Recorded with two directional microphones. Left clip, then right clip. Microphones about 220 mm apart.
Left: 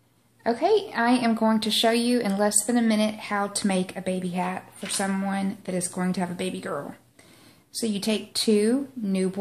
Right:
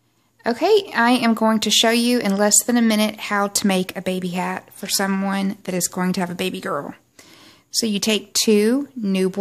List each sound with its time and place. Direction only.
0.4 s a woman's voice: 45° right (ahead or behind)